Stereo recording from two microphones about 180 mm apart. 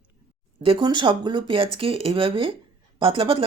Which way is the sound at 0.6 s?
30° right (ahead or behind).